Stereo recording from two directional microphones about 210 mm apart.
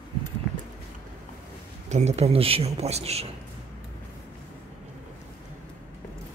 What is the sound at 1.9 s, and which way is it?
A man's voice, 30° right (ahead or behind).